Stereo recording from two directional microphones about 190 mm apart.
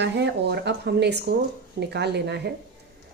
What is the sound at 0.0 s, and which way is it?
Speech, 65° right (ahead or behind).